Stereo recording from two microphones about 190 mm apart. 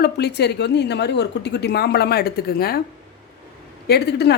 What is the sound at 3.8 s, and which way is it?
Speech, 60° left (ahead or behind).